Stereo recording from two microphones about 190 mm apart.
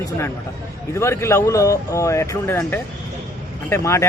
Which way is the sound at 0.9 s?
15° left (ahead or behind).